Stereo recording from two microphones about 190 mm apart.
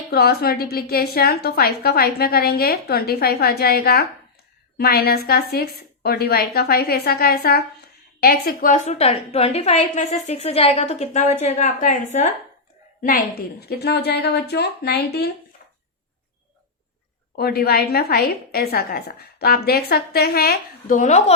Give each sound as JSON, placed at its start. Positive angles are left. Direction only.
{"t": 0.1, "sound": "a woman's voice", "side_deg": 55}
{"t": 17.3, "sound": "a woman's voice", "side_deg": 55}